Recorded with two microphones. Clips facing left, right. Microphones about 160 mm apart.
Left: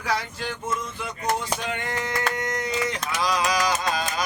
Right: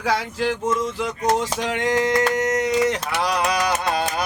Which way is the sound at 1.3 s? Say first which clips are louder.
Right 4 dB; 85° right.